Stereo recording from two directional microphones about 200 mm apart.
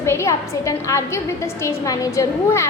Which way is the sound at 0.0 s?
15° left (ahead or behind).